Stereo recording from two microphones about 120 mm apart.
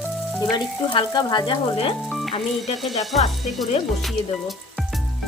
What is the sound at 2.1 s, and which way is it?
Music, centre (ahead or behind).